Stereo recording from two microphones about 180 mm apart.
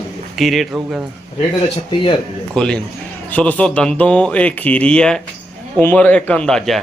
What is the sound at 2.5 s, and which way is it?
A man's voice, 5° left (ahead or behind).